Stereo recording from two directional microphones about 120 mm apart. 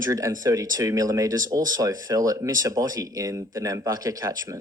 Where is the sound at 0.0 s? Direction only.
30° right (ahead or behind).